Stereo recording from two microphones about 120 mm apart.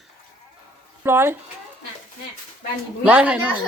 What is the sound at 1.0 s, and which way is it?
Speech, 20° right (ahead or behind).